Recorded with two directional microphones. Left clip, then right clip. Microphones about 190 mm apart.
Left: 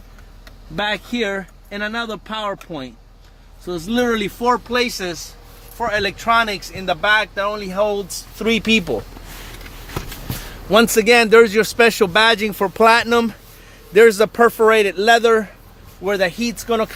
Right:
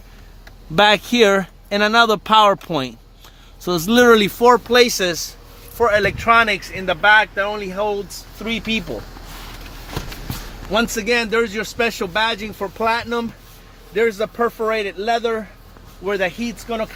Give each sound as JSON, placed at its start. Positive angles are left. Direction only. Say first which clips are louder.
{"t": 0.8, "sound": "speech", "louder": "right 8 dB", "side_deg": -45}
{"t": 6.0, "sound": "speech", "louder": "left 1 dB", "side_deg": -15}
{"t": 7.6, "sound": "speech", "louder": "left 4 dB", "side_deg": 25}
{"t": 7.9, "sound": "speech", "louder": "left 1 dB", "side_deg": 50}
{"t": 10.7, "sound": "speech", "louder": "left 6 dB", "side_deg": 60}
{"t": 16.0, "sound": "speech", "louder": "left 2 dB", "side_deg": 35}
{"t": 16.6, "sound": "speech", "louder": "left 5 dB", "side_deg": 50}